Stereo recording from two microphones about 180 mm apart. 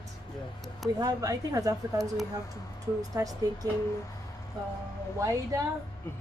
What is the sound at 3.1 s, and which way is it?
Speech, 20° right (ahead or behind).